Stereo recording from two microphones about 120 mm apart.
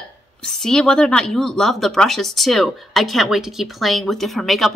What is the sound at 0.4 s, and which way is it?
A woman's voice, 5° left (ahead or behind).